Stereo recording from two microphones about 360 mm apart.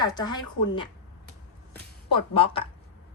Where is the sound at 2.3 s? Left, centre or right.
Centre.